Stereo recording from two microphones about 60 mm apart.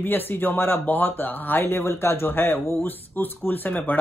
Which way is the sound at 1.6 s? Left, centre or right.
Left.